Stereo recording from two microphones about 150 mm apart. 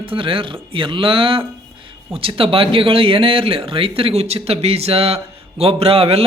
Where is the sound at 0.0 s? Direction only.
35° right (ahead or behind).